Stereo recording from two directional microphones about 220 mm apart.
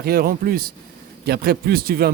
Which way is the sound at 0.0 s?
45° right (ahead or behind).